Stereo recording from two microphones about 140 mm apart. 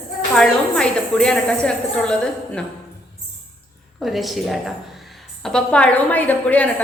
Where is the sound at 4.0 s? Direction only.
Centre (ahead or behind).